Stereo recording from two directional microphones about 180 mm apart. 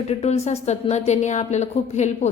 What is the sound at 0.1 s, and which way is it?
A woman's voice, 35° left (ahead or behind).